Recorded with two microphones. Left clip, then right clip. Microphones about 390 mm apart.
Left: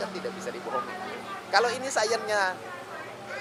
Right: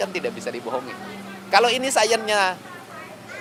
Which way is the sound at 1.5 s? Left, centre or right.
Right.